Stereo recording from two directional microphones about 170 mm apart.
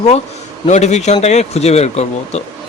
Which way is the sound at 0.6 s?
40° left (ahead or behind).